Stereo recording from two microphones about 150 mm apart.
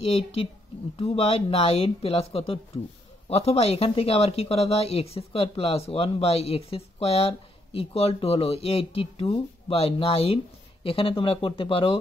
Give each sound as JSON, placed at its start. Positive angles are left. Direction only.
{"t": 0.0, "sound": "speech", "side_deg": 40}